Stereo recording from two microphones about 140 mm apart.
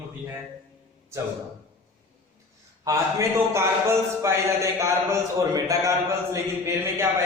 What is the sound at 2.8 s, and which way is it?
A man's voice, 20° right (ahead or behind).